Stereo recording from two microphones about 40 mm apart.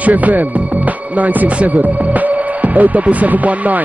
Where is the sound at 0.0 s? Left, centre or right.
Right.